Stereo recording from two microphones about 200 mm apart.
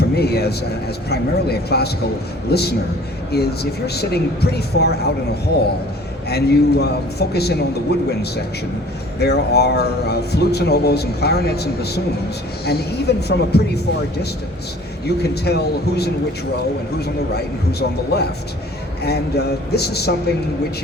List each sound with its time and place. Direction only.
0.2 s speech: 55° left (ahead or behind)
6.2 s a man's voice: 55° left (ahead or behind)
9.1 s a man's voice: 55° left (ahead or behind)
15.0 s a man's voice: 55° left (ahead or behind)